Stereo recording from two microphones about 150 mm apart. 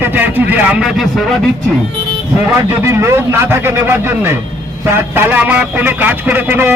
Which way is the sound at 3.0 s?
20° right (ahead or behind).